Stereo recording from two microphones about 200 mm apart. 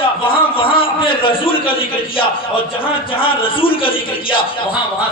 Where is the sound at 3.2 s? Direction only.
25° left (ahead or behind).